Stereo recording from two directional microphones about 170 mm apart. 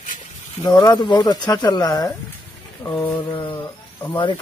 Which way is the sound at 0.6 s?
25° left (ahead or behind).